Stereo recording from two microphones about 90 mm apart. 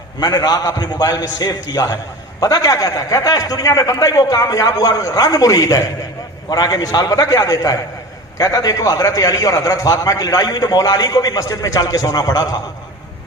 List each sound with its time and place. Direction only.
0.2 s a man's voice: 50° left (ahead or behind)